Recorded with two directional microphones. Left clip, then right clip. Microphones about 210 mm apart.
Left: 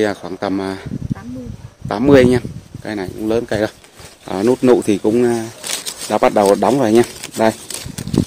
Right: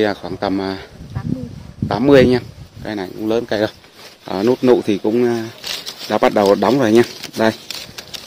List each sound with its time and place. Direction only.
0.0 s speech: centre (ahead or behind)
1.9 s speech: 5° left (ahead or behind)
6.0 s speech: centre (ahead or behind)